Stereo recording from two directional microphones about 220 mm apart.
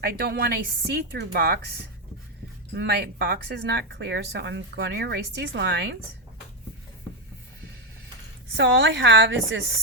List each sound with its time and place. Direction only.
0.0 s speech: 45° right (ahead or behind)
2.7 s speech: 50° right (ahead or behind)
8.5 s a woman's voice: 55° right (ahead or behind)